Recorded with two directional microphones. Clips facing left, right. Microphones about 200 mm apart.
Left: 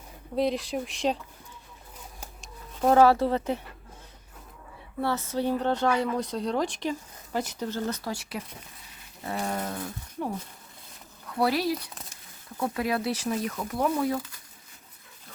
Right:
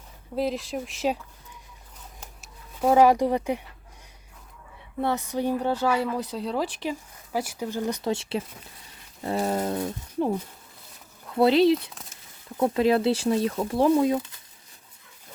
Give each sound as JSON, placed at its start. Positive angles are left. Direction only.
{"t": 0.3, "sound": "speech", "side_deg": 0}
{"t": 2.4, "sound": "speech", "side_deg": -10}
{"t": 4.9, "sound": "speech", "side_deg": -15}
{"t": 11.3, "sound": "speech", "side_deg": -25}